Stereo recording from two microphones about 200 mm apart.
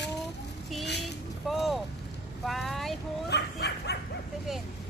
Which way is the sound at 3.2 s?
55° left (ahead or behind).